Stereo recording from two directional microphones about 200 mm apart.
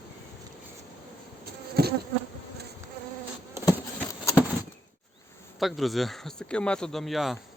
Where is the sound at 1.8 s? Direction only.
50° right (ahead or behind).